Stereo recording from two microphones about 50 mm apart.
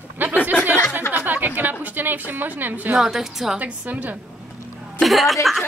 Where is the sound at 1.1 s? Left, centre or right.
Right.